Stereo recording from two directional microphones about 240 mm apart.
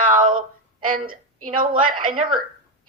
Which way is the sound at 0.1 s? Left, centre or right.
Right.